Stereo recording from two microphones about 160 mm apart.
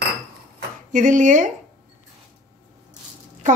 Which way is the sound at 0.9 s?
50° right (ahead or behind).